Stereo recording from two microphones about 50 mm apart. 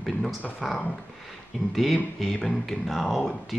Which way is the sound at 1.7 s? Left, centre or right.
Centre.